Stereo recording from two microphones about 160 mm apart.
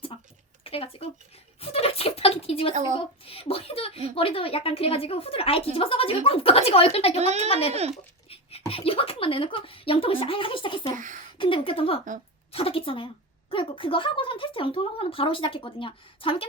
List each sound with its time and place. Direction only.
0.1 s a sound: 35° left (ahead or behind)
0.6 s speech: 35° left (ahead or behind)
1.6 s a sound: 40° left (ahead or behind)
2.7 s speech: 50° right (ahead or behind)
3.0 s speech: 35° left (ahead or behind)
7.2 s speech: 45° right (ahead or behind)
7.4 s speech: 40° left (ahead or behind)
7.7 s speech: 40° right (ahead or behind)
8.3 s beatboxing: 35° left (ahead or behind)
10.9 s speech: 55° right (ahead or behind)
11.3 s speech: 35° left (ahead or behind)